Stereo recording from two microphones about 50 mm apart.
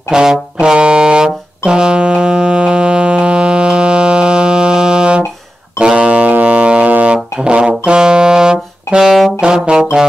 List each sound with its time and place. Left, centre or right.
0.1 s brass instrument: centre
5.8 s music: right
7.3 s saxophone: centre
9.4 s brass instrument: centre